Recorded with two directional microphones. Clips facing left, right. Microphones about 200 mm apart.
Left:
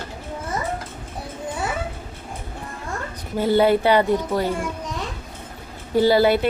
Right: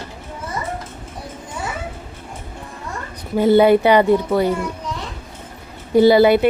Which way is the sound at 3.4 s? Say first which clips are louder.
Right 5 dB; 15° right (ahead or behind).